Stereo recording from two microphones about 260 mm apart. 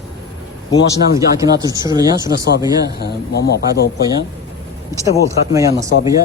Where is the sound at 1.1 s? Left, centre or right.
Centre.